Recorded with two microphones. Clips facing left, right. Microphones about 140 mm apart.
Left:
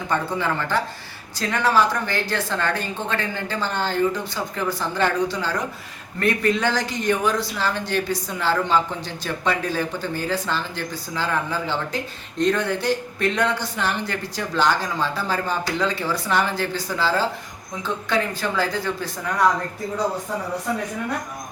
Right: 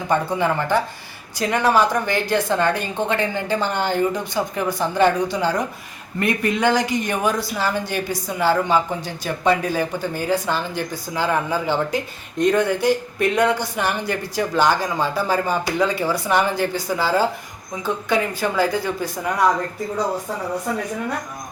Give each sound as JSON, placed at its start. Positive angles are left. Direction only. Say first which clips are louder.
{"t": 0.1, "sound": "speech", "louder": "right 4 dB", "side_deg": -15}